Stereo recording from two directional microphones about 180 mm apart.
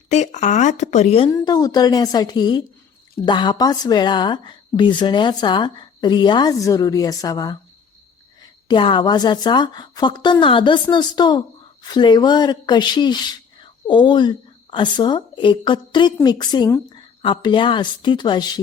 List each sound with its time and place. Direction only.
0.1 s speech: 40° left (ahead or behind)
1.3 s a woman's voice: 20° left (ahead or behind)
8.6 s a woman's voice: 25° left (ahead or behind)